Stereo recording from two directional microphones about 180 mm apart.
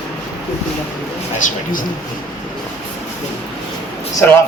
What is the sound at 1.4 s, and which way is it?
Speech, 50° left (ahead or behind).